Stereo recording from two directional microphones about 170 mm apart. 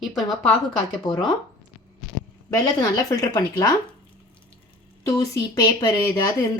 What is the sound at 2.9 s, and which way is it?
Speech, 20° left (ahead or behind).